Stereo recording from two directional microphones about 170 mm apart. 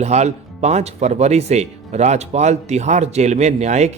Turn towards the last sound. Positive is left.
turn(degrees=-40)  # may be behind; listen again after turning